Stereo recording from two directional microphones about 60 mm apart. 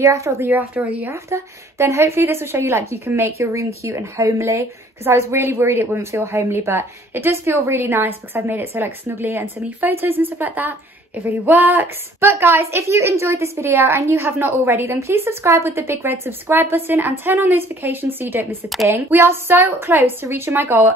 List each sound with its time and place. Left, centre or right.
0.0 s speech: right
0.8 s speech: right
1.1 s speech: right
2.6 s a woman's voice: right